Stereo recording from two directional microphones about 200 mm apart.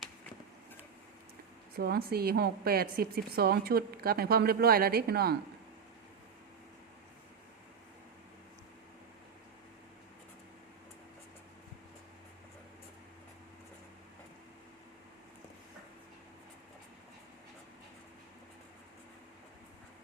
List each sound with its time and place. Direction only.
1.7 s a woman's voice: 50° right (ahead or behind)